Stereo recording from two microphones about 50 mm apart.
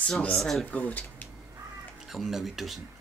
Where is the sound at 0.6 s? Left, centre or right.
Left.